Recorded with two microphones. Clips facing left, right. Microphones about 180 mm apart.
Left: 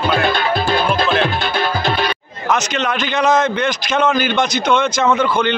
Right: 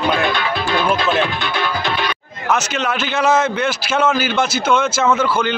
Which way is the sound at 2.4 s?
10° right (ahead or behind).